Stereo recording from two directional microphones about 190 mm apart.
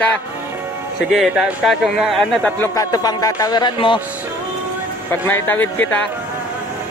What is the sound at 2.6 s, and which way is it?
Speech, 20° left (ahead or behind).